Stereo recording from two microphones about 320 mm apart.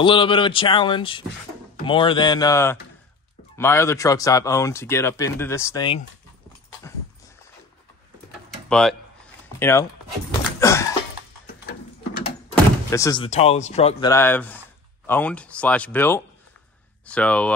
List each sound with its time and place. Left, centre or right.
0.0 s speech: centre
8.6 s speech: centre
10.6 s a sound: centre
12.5 s speech: centre
14.1 s speech: centre